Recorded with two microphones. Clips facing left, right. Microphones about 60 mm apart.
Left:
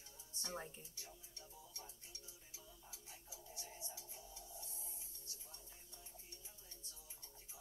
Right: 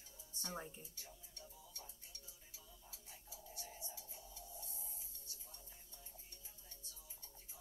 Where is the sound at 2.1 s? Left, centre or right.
Centre.